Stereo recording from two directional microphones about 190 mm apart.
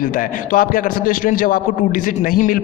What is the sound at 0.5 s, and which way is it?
A man's voice, 45° left (ahead or behind).